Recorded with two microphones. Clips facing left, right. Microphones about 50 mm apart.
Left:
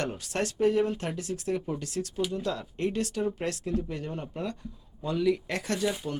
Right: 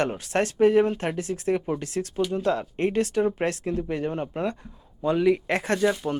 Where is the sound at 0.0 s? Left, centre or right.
Right.